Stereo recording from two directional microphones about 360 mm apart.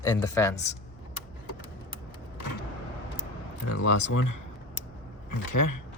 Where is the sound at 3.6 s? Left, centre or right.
Left.